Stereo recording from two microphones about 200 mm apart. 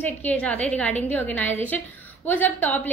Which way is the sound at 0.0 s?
5° left (ahead or behind).